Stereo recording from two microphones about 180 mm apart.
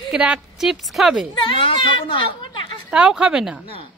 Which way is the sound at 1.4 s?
30° left (ahead or behind).